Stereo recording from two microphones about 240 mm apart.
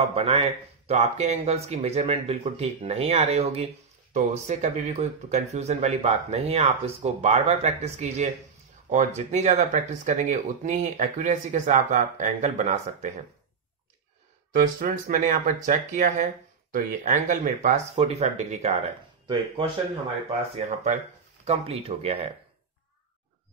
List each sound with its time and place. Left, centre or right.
0.1 s speech: right
14.5 s speech: right